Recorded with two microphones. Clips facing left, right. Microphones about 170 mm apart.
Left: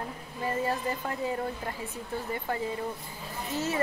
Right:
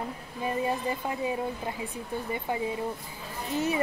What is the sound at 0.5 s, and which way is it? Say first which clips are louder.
Speech: right 1 dB; 15° right (ahead or behind).